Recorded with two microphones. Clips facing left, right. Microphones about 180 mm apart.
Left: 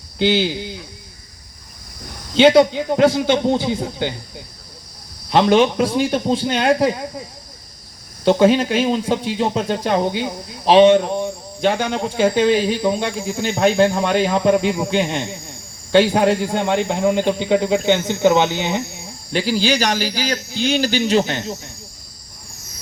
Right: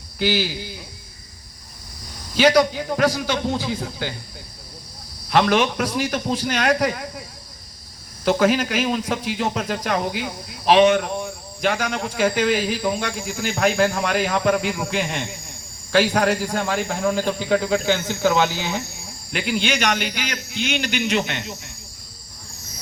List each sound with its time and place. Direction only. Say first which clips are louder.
0.2 s speech: left 5 dB; 25° left (ahead or behind)
2.3 s speech: left 5 dB; 25° left (ahead or behind)
5.3 s speech: left 4 dB; 25° left (ahead or behind)
8.2 s a man's voice: left 5 dB; 30° left (ahead or behind)